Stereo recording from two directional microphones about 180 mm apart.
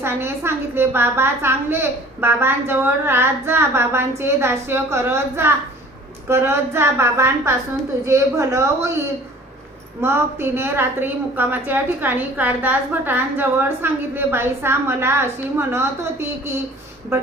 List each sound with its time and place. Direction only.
0.0 s a woman's voice: 15° right (ahead or behind)
10.0 s a woman's voice: 15° right (ahead or behind)